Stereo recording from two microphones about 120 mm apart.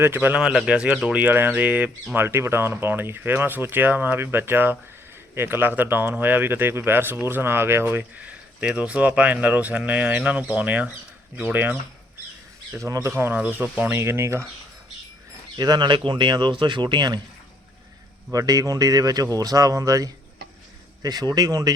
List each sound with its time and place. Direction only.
0.0 s speech: 15° right (ahead or behind)
12.7 s speech: 25° right (ahead or behind)
15.5 s speech: 35° right (ahead or behind)
18.3 s speech: 30° right (ahead or behind)